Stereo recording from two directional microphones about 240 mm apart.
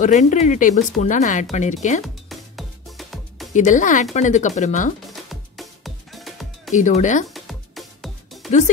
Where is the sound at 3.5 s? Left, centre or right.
Left.